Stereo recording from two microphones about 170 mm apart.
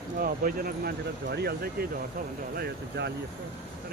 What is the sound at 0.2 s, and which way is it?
Speech, 60° right (ahead or behind).